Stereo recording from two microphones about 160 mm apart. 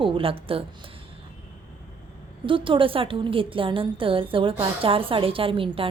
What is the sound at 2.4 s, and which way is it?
A woman's voice, 30° right (ahead or behind).